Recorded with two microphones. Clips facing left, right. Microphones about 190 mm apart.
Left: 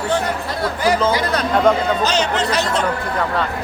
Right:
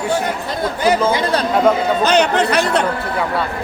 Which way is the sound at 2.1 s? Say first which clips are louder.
Right 5 dB; 60° right (ahead or behind).